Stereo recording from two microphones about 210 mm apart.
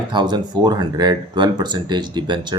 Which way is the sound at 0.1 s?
20° right (ahead or behind).